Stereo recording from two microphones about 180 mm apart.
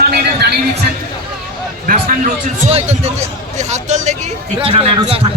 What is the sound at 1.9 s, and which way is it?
A man's voice, 45° right (ahead or behind).